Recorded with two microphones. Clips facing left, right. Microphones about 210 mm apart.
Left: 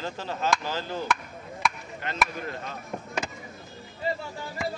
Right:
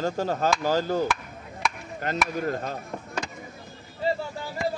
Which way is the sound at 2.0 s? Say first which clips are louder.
Right 4 dB; 45° right (ahead or behind).